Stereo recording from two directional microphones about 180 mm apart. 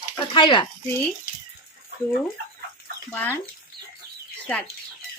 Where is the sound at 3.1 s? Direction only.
10° left (ahead or behind).